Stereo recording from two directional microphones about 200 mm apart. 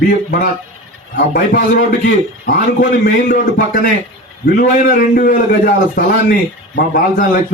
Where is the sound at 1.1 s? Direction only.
50° left (ahead or behind).